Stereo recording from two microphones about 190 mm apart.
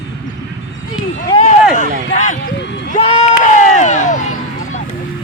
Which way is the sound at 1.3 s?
25° left (ahead or behind).